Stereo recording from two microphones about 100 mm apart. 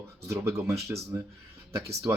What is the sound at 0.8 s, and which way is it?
Speech, 30° right (ahead or behind).